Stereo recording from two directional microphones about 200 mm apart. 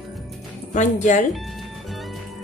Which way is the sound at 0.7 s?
35° left (ahead or behind).